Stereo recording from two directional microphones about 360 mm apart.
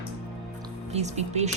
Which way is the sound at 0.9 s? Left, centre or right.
Centre.